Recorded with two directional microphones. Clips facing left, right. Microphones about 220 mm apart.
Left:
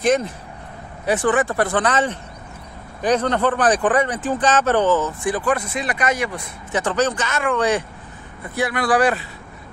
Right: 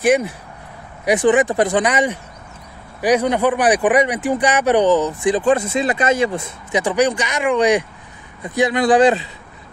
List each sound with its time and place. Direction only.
0.0 s speech: 10° right (ahead or behind)
6.8 s speech: 10° right (ahead or behind)